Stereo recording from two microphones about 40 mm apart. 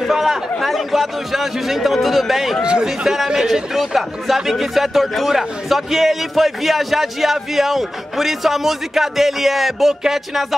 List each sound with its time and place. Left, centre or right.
0.1 s speech: centre
2.6 s speech: centre
3.7 s speech: centre